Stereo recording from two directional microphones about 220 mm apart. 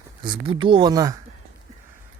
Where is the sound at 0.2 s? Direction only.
20° right (ahead or behind).